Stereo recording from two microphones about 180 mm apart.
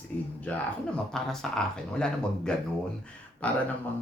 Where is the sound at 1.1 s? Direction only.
5° left (ahead or behind).